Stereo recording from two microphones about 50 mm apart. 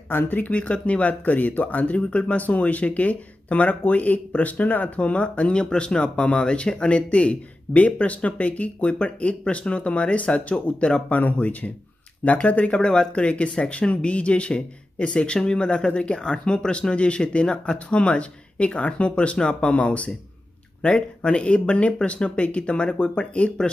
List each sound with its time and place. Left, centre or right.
0.1 s speech: left
0.5 s speech: left